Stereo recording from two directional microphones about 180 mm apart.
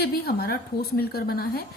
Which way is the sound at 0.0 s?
60° left (ahead or behind).